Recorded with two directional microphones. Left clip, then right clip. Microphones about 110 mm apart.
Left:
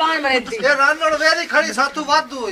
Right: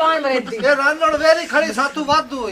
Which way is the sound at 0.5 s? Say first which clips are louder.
Even; 5° left (ahead or behind).